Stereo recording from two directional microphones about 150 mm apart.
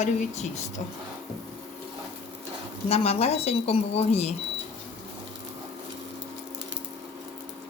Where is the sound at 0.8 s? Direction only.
50° left (ahead or behind).